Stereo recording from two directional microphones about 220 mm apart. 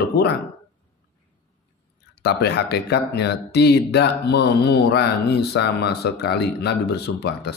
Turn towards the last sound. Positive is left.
turn(degrees=45)  # may be behind; listen again after turning